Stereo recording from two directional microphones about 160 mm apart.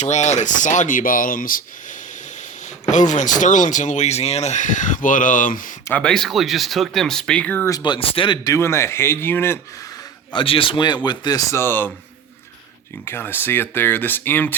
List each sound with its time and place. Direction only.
0.0 s speech: 45° left (ahead or behind)
5.9 s speech: 5° left (ahead or behind)
7.7 s a man's voice: 30° left (ahead or behind)
8.5 s speech: 15° left (ahead or behind)
10.3 s a man's voice: 35° left (ahead or behind); by 11.9 s 15° left (ahead or behind)
13.1 s speech: 15° left (ahead or behind)